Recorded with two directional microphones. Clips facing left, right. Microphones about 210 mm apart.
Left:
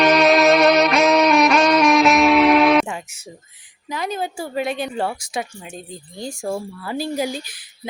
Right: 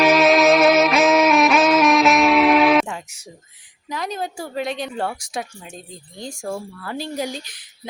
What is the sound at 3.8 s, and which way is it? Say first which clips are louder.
Speech: left 2 dB; 5° left (ahead or behind).